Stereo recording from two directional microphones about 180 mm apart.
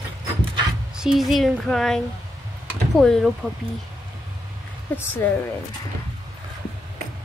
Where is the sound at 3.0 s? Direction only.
Centre (ahead or behind).